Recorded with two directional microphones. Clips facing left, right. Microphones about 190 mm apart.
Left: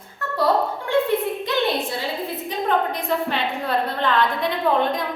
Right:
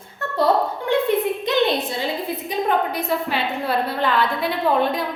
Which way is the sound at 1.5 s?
20° right (ahead or behind).